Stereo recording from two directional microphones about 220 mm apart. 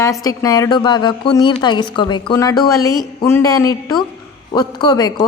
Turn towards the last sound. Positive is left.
turn(degrees=20)  # may be behind; listen again after turning